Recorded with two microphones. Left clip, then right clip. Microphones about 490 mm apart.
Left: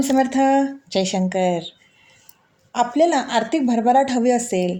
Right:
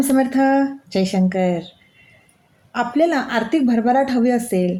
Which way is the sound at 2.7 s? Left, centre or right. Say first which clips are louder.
Left 1 dB; right.